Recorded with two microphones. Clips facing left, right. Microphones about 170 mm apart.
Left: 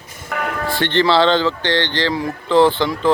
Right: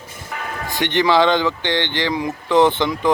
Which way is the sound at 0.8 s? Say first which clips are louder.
Even; 15° right (ahead or behind).